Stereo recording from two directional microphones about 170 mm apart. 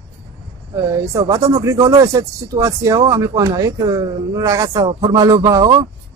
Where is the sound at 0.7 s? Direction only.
20° right (ahead or behind).